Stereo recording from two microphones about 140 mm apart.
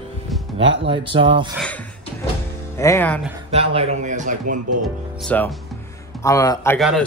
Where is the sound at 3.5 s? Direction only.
45° right (ahead or behind).